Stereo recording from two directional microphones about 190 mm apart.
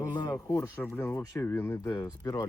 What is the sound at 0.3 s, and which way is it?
Speech, 15° left (ahead or behind).